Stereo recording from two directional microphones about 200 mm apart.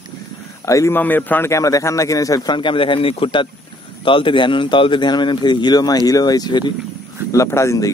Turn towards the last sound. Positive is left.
turn(degrees=15)  # may be behind; listen again after turning